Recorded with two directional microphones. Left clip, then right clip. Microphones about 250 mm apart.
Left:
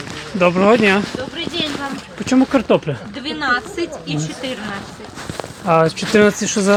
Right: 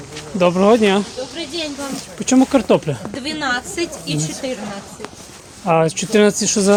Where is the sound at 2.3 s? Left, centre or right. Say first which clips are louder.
Right 1 dB; right.